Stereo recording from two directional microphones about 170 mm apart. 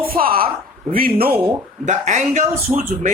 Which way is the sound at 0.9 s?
60° right (ahead or behind).